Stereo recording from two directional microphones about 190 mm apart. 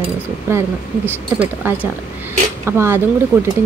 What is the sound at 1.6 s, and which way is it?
Speech, 10° right (ahead or behind).